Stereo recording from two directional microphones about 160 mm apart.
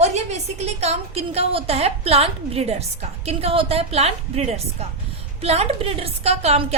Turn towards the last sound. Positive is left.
turn(degrees=-40)  # may be behind; listen again after turning